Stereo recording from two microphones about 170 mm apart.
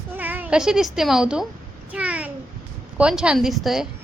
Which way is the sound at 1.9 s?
10° right (ahead or behind).